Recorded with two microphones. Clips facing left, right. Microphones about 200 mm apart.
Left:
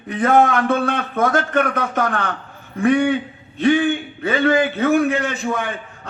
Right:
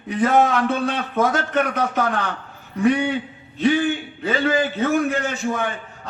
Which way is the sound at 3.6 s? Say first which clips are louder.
Left 3 dB; 60° left (ahead or behind).